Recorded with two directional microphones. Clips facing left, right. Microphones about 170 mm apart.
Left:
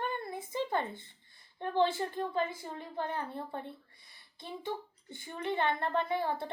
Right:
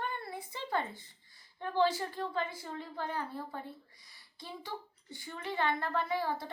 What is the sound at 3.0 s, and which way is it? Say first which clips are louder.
Speech: left 2 dB; 25° left (ahead or behind).